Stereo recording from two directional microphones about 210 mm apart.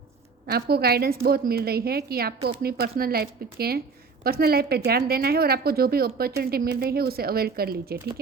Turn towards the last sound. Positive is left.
turn(degrees=-45)  # may be behind; listen again after turning